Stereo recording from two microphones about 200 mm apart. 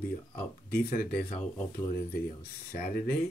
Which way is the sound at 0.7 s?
50° left (ahead or behind).